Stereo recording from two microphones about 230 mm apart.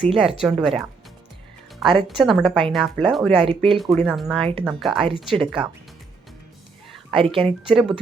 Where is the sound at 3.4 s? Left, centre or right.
Right.